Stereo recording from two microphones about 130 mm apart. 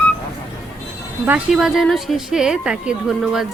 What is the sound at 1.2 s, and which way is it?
A woman's voice, 5° right (ahead or behind).